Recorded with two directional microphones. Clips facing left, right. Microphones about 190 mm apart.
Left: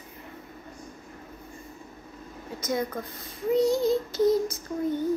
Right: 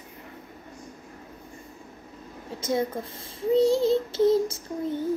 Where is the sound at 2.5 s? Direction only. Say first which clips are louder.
Right 2 dB; 25° right (ahead or behind).